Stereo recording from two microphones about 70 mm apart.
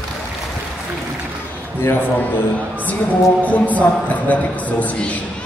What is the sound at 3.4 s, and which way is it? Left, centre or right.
A man's voice, left.